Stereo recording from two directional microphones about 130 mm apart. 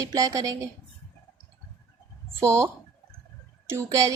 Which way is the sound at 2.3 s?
20° right (ahead or behind).